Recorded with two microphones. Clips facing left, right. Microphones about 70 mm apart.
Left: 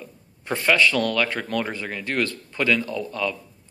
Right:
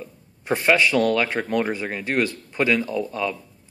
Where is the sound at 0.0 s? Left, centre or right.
Right.